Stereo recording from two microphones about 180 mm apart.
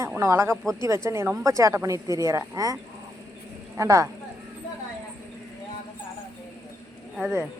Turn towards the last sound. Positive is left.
turn(degrees=-10)  # may be behind; listen again after turning